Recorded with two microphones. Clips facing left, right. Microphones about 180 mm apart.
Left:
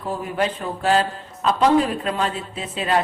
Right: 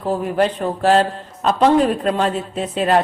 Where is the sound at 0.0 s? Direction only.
30° right (ahead or behind).